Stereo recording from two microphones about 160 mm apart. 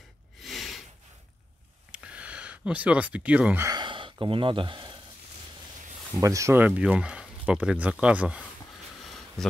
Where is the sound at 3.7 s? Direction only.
30° right (ahead or behind).